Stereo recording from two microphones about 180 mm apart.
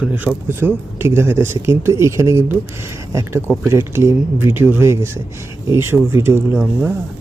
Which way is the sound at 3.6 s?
15° right (ahead or behind).